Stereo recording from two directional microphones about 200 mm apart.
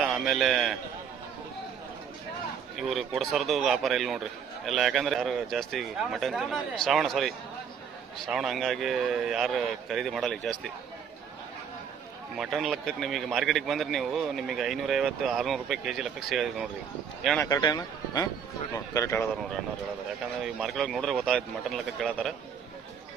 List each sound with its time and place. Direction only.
0.0 s a man's voice: centre (ahead or behind)
2.7 s a man's voice: centre (ahead or behind)
12.4 s a man's voice: centre (ahead or behind)
17.4 s a man's voice: 20° left (ahead or behind)
20.4 s a man's voice: centre (ahead or behind)